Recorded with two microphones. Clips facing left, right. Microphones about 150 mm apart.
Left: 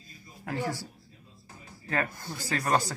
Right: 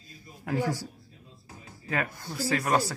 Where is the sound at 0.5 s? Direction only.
15° right (ahead or behind).